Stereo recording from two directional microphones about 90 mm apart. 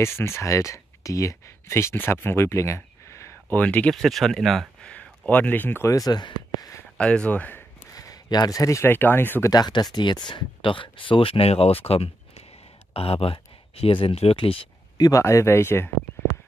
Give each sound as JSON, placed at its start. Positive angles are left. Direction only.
{"t": 0.0, "sound": "speech", "side_deg": 30}
{"t": 3.5, "sound": "speech", "side_deg": 15}
{"t": 3.9, "sound": "speech", "side_deg": 0}
{"t": 4.9, "sound": "speech", "side_deg": 15}
{"t": 5.9, "sound": "speech", "side_deg": 45}
{"t": 7.0, "sound": "speech", "side_deg": 10}
{"t": 7.9, "sound": "a sound", "side_deg": 40}
{"t": 8.8, "sound": "speech", "side_deg": 25}
{"t": 9.5, "sound": "speech", "side_deg": 50}
{"t": 15.0, "sound": "speech", "side_deg": 40}